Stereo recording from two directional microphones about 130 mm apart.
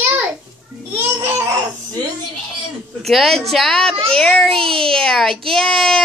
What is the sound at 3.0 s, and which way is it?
Speech, centre (ahead or behind).